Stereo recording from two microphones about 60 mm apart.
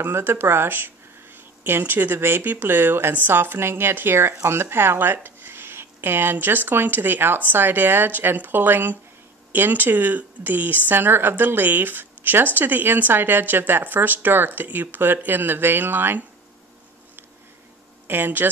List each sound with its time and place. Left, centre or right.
0.0 s speech: right
18.0 s speech: right